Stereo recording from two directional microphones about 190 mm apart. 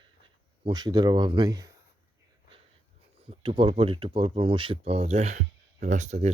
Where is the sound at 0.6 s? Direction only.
20° right (ahead or behind).